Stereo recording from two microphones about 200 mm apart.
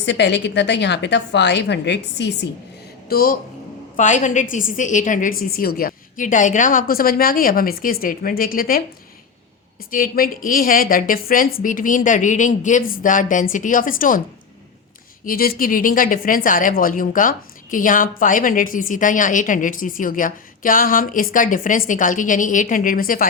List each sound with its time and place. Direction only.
0.0 s a woman's voice: 60° left (ahead or behind)
3.1 s a woman's voice: 50° left (ahead or behind)
9.9 s a woman's voice: 45° left (ahead or behind)
15.2 s a woman's voice: 45° left (ahead or behind)